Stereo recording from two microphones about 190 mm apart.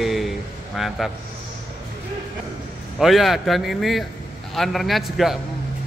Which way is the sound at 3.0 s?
Centre (ahead or behind).